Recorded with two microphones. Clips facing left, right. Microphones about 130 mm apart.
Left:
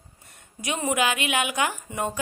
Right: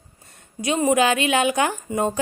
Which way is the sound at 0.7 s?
25° right (ahead or behind).